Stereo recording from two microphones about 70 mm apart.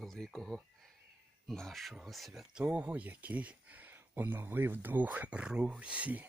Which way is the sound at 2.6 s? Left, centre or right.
Right.